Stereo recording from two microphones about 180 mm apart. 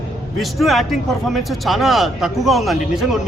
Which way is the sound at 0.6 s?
Centre (ahead or behind).